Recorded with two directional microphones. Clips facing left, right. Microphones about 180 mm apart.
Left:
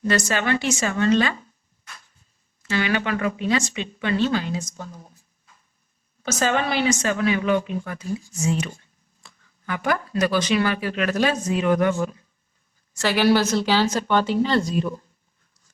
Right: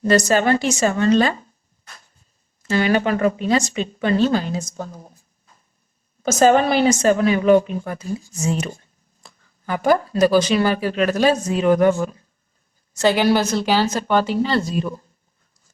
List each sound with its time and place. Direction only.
0.0 s a woman's voice: 40° right (ahead or behind)
2.6 s a woman's voice: 40° right (ahead or behind)
6.2 s a woman's voice: 45° right (ahead or behind)
13.0 s a woman's voice: 20° right (ahead or behind)